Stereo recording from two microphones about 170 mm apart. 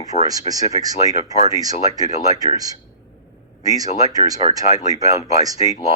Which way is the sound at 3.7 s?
20° right (ahead or behind).